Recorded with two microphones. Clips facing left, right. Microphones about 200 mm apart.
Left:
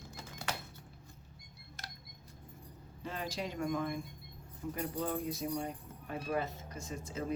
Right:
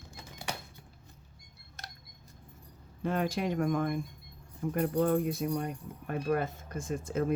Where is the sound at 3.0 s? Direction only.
55° right (ahead or behind).